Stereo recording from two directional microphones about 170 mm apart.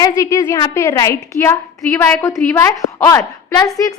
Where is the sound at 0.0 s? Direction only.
15° left (ahead or behind).